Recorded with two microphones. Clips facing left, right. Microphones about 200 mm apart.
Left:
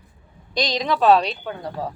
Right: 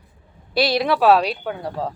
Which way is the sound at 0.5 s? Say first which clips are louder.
Right 4 dB; 10° right (ahead or behind).